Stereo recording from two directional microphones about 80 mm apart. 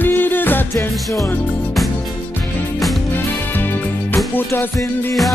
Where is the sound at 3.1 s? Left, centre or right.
Left.